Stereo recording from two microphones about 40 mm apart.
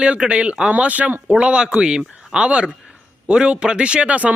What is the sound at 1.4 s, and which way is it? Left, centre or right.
Speech, right.